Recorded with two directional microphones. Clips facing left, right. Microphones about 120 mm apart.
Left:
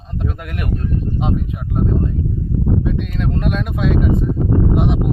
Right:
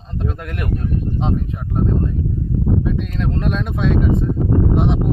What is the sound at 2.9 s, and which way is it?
Speech, centre (ahead or behind).